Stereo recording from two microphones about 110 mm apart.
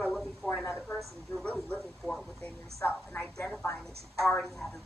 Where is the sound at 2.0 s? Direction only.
Centre (ahead or behind).